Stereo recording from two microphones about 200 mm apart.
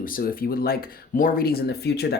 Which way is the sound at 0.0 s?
45° left (ahead or behind).